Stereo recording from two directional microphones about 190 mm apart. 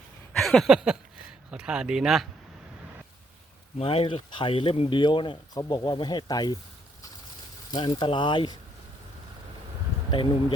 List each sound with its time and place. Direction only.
0.3 s a sound: centre (ahead or behind)
1.5 s speech: 5° right (ahead or behind)
3.8 s speech: 30° left (ahead or behind)
7.7 s speech: 25° left (ahead or behind)